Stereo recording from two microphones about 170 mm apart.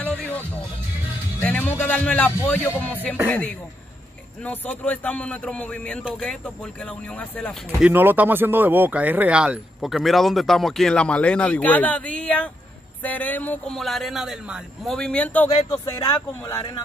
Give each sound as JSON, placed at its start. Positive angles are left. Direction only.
{"t": 0.0, "sound": "music", "side_deg": 10}
{"t": 1.4, "sound": "a man's voice", "side_deg": 10}
{"t": 7.8, "sound": "speech", "side_deg": -10}
{"t": 15.7, "sound": "speech", "side_deg": 20}